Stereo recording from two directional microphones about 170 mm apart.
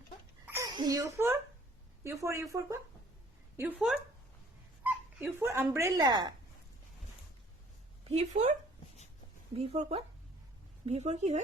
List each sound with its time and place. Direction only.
0.4 s a sound: 15° right (ahead or behind)
2.0 s speech: 15° right (ahead or behind)
3.6 s speech: 10° right (ahead or behind); by 6.3 s 25° right (ahead or behind)
8.1 s speech: 40° right (ahead or behind)
9.6 s speech: 35° right (ahead or behind)